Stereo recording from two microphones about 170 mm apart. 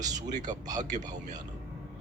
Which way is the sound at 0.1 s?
45° right (ahead or behind).